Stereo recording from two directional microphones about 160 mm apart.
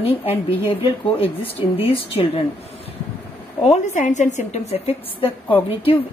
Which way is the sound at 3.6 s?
45° left (ahead or behind).